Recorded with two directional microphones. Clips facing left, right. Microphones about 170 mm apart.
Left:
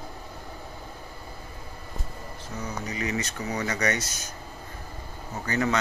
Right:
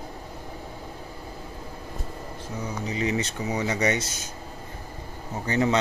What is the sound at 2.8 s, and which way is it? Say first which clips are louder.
Speech: right 5 dB; 25° right (ahead or behind).